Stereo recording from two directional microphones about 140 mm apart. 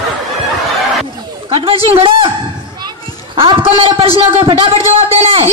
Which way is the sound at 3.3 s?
40° right (ahead or behind).